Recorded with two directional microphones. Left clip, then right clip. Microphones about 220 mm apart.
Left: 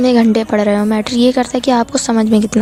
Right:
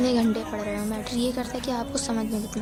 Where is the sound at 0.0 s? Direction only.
35° left (ahead or behind).